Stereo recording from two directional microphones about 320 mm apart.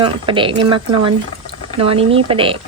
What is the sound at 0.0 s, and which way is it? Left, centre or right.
Speech, centre.